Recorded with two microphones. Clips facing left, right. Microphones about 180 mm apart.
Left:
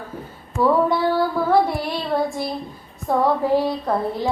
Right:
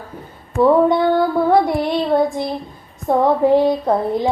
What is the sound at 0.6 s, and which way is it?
Female singing, 20° right (ahead or behind).